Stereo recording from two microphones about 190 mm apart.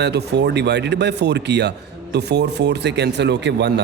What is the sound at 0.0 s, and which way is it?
Speech, 60° right (ahead or behind).